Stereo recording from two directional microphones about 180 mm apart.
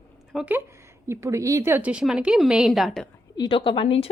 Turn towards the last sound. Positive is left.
turn(degrees=30)  # may be behind; listen again after turning